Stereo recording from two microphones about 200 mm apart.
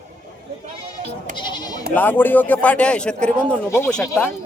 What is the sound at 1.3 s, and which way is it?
Speech, 20° left (ahead or behind).